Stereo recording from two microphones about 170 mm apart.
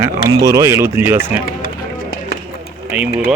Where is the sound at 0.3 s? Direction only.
20° right (ahead or behind).